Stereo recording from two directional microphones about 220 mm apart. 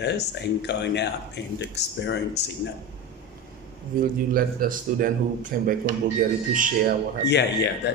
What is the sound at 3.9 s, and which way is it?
A man's voice, 40° right (ahead or behind).